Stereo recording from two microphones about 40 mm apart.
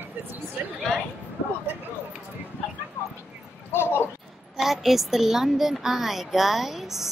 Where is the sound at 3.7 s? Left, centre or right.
Left.